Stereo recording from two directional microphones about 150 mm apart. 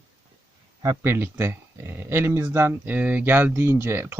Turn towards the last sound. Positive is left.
turn(degrees=-15)  # may be behind; listen again after turning